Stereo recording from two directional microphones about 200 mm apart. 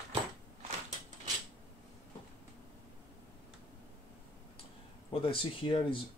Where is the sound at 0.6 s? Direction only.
35° right (ahead or behind).